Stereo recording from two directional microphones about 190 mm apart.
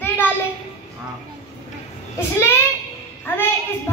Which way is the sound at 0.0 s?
10° left (ahead or behind).